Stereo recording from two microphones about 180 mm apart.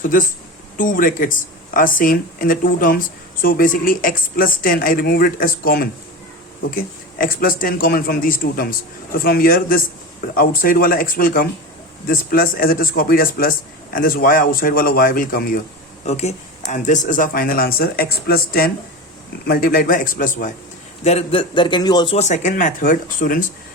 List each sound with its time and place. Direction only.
0.0 s a man's voice: 50° left (ahead or behind)
16.0 s a man's voice: 40° left (ahead or behind)
21.0 s speech: 35° left (ahead or behind)